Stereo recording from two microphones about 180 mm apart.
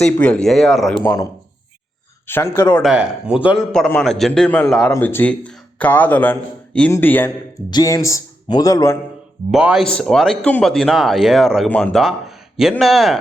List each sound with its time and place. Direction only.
0.0 s speech: 5° left (ahead or behind)
2.2 s speech: 15° left (ahead or behind)
2.8 s speech: 5° right (ahead or behind)
3.7 s speech: 5° left (ahead or behind)
7.7 s speech: 20° left (ahead or behind)
9.5 s speech: 5° right (ahead or behind)